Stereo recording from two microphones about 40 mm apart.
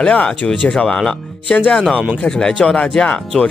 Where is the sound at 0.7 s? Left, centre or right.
Centre.